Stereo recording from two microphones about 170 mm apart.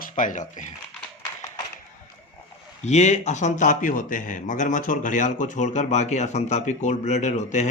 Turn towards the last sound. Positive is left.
turn(degrees=45)  # may be behind; listen again after turning